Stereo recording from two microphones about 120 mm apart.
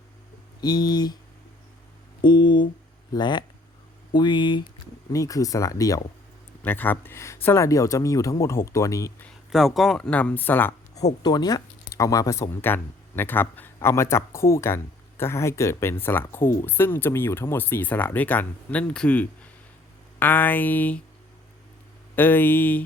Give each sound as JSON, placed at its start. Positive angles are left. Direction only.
{"t": 0.6, "sound": "speech", "side_deg": 35}
{"t": 2.2, "sound": "speech", "side_deg": 40}
{"t": 5.1, "sound": "speech", "side_deg": 30}
{"t": 6.6, "sound": "speech", "side_deg": 15}
{"t": 9.5, "sound": "speech", "side_deg": 0}
{"t": 11.2, "sound": "speech", "side_deg": 35}
{"t": 22.1, "sound": "speech", "side_deg": 15}